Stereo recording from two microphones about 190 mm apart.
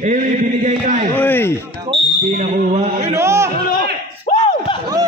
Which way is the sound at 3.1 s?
15° right (ahead or behind).